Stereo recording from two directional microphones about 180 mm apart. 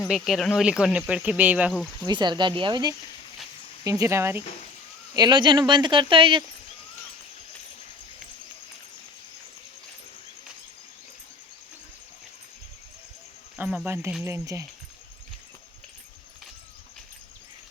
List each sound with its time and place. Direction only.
0.0 s speech: centre (ahead or behind)
2.0 s speech: 25° right (ahead or behind)
5.1 s speech: 25° right (ahead or behind)
13.6 s speech: 10° right (ahead or behind)